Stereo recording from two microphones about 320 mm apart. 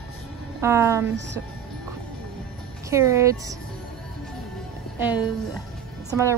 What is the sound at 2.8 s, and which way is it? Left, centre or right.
Speech, centre.